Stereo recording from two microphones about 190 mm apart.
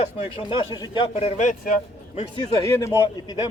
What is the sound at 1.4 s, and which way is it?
Speech, 45° left (ahead or behind).